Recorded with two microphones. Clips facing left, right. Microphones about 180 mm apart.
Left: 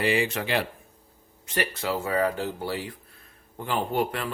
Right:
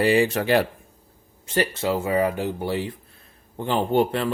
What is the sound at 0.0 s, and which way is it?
Speech, 40° right (ahead or behind).